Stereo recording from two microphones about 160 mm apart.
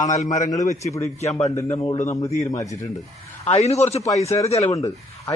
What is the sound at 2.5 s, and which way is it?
Speech, 20° left (ahead or behind).